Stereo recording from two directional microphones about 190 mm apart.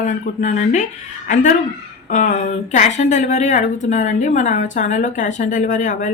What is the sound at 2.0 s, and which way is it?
A woman's voice, 40° left (ahead or behind).